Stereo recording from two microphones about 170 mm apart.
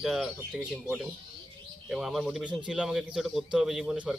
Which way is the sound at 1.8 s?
Centre (ahead or behind).